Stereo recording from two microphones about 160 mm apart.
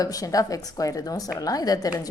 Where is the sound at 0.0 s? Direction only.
20° left (ahead or behind).